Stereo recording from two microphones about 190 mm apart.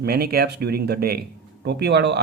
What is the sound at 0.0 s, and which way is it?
Speech, 55° right (ahead or behind).